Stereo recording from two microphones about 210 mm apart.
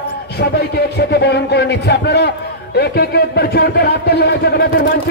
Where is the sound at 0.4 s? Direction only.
50° left (ahead or behind).